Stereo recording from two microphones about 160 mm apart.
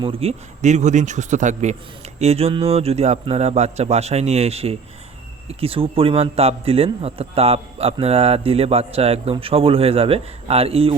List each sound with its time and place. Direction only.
0.0 s a man's voice: 35° right (ahead or behind)